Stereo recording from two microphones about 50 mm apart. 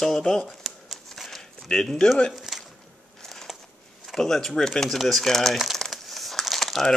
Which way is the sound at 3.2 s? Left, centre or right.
Centre.